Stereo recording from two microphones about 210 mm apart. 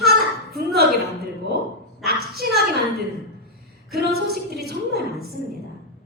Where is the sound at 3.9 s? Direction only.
50° right (ahead or behind).